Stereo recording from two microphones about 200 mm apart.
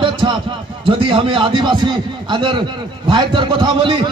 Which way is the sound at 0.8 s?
25° right (ahead or behind).